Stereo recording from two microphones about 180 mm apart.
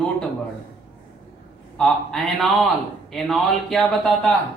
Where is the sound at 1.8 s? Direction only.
Centre (ahead or behind).